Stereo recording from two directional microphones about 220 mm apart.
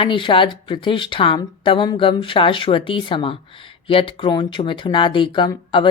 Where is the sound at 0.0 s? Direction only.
25° left (ahead or behind).